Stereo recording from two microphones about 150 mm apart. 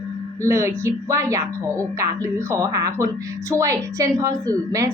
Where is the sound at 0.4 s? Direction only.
20° right (ahead or behind).